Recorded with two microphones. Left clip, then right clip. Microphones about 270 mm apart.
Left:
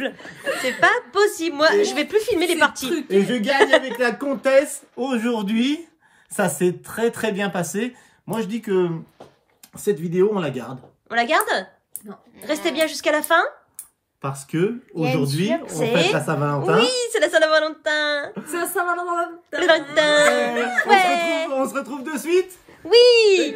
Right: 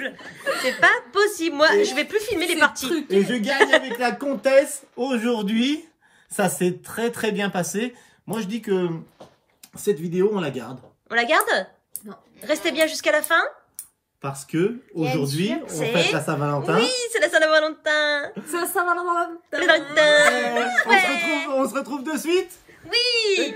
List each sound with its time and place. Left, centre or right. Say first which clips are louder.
0.5 s a woman's voice: even; centre
15.2 s speech: left 3 dB; left
15.6 s a woman's voice: left 1 dB; centre
21.5 s a woman's voice: even; centre
22.8 s speech: left 8 dB; centre